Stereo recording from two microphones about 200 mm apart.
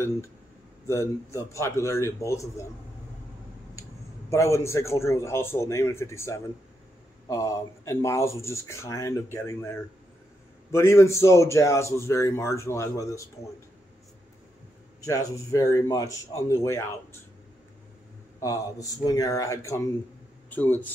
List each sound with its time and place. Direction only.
0.8 s speech: 15° left (ahead or behind)
4.3 s speech: 15° left (ahead or behind)
15.0 s speech: 15° left (ahead or behind)
18.4 s speech: 15° left (ahead or behind)